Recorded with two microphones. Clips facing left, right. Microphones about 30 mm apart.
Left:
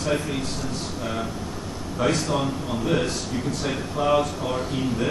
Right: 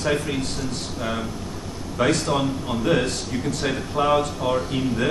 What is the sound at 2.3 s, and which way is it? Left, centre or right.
Speech, right.